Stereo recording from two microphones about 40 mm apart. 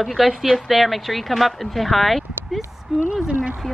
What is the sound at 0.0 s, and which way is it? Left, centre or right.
Speech, centre.